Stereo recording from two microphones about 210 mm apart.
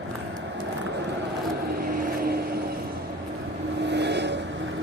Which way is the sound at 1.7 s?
45° right (ahead or behind).